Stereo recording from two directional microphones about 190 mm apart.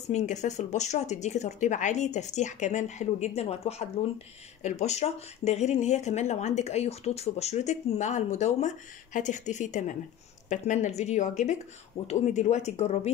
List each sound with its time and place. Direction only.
0.1 s speech: 40° left (ahead or behind)